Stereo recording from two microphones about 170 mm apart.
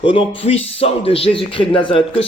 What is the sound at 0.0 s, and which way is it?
Speech, 35° left (ahead or behind).